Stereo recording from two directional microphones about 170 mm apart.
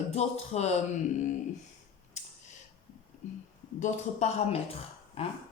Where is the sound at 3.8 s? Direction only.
40° left (ahead or behind).